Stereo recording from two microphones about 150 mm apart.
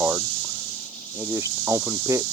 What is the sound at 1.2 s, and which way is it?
Speech, 15° right (ahead or behind).